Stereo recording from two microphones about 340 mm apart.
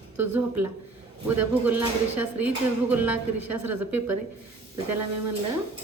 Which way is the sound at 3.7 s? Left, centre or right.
Right.